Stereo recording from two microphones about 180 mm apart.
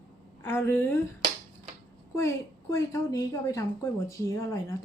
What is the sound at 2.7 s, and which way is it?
Speech, 20° left (ahead or behind).